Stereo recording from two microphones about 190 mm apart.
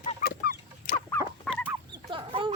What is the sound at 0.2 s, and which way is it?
Chicken, 55° left (ahead or behind).